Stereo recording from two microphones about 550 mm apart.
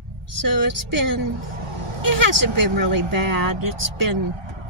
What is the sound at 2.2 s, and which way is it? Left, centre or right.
Speech, right.